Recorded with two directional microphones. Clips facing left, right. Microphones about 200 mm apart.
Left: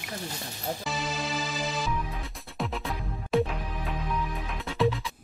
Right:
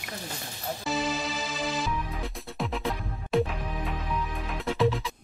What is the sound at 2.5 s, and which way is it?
Music, centre (ahead or behind).